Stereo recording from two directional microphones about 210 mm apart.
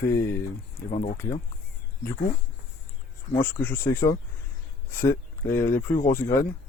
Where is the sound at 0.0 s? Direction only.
10° left (ahead or behind).